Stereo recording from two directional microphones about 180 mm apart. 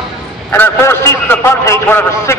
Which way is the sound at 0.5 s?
10° left (ahead or behind).